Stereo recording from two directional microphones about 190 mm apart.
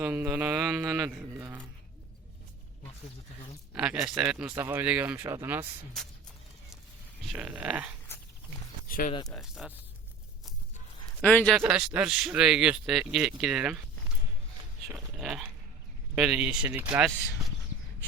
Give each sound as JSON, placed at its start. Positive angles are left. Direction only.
{"t": 0.0, "sound": "speech", "side_deg": -10}
{"t": 3.8, "sound": "speech", "side_deg": -10}
{"t": 7.3, "sound": "speech", "side_deg": -5}
{"t": 8.9, "sound": "speech", "side_deg": 45}
{"t": 9.2, "sound": "speech", "side_deg": 0}
{"t": 11.2, "sound": "a man's voice", "side_deg": 5}
{"t": 14.9, "sound": "speech", "side_deg": 0}